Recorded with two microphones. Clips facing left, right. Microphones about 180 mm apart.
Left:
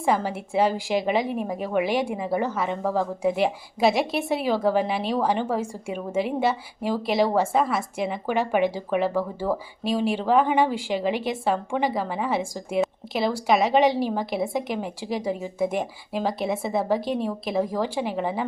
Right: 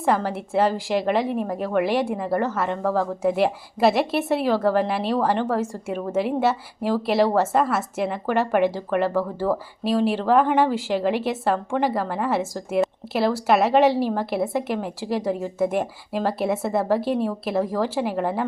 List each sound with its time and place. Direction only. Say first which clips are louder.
0.0 s a woman's voice: right 2 dB; centre (ahead or behind)